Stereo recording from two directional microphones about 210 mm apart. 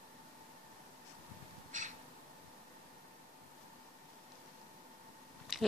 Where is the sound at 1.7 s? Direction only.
35° right (ahead or behind).